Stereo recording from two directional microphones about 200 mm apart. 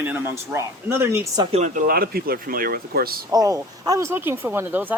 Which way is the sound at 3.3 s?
15° right (ahead or behind).